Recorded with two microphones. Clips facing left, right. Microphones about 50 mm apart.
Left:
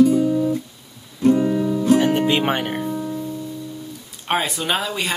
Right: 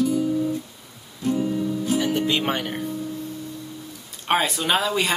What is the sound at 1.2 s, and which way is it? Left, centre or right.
Music, left.